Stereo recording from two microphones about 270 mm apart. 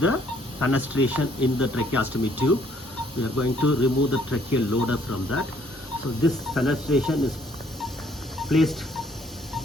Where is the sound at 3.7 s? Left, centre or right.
Left.